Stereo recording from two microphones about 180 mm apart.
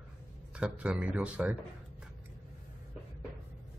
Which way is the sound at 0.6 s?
5° right (ahead or behind).